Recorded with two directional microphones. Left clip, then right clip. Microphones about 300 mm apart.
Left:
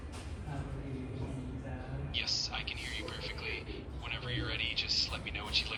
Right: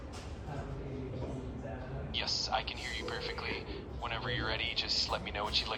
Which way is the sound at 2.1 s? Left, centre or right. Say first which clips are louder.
Right 2 dB; centre.